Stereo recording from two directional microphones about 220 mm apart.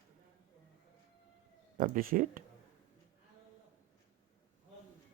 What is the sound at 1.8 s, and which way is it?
Speech, 40° right (ahead or behind).